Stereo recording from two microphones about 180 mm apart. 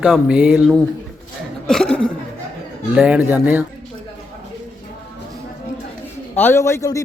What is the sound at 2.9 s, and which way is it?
Speech, 5° right (ahead or behind).